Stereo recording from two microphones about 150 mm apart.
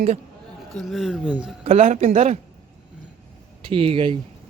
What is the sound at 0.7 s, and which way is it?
Speech, centre (ahead or behind).